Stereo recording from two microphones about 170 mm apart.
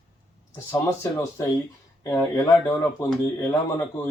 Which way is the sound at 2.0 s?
15° left (ahead or behind).